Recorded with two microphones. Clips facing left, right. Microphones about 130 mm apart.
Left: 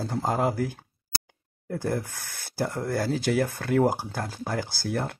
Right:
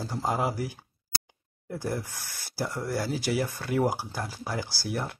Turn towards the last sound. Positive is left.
turn(degrees=55)  # may be behind; listen again after turning